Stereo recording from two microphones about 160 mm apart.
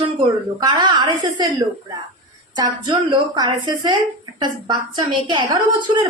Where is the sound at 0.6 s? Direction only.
25° right (ahead or behind).